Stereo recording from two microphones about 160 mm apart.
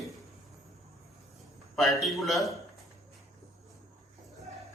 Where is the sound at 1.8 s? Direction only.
Centre (ahead or behind).